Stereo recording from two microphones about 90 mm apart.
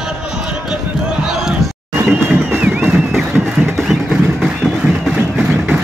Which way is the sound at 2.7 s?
5° right (ahead or behind).